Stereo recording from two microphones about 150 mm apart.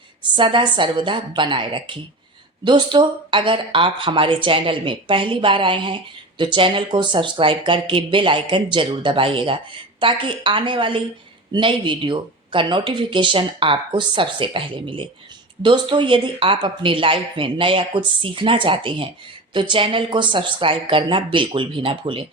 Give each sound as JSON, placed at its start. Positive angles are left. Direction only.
{"t": 0.3, "sound": "speech", "side_deg": -30}